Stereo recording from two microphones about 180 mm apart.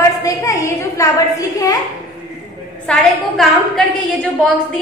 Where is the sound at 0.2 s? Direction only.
20° left (ahead or behind).